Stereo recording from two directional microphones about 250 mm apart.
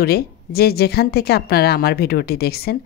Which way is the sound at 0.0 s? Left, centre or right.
Left.